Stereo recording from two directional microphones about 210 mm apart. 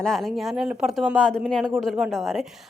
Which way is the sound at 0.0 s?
Centre (ahead or behind).